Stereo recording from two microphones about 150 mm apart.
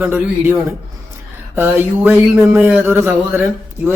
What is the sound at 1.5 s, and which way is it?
A man's voice, 15° right (ahead or behind).